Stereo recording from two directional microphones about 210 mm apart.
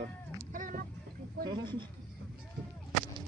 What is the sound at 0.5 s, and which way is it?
Boat, 40° right (ahead or behind).